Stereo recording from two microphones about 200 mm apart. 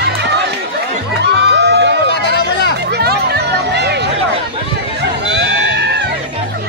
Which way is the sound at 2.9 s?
55° right (ahead or behind).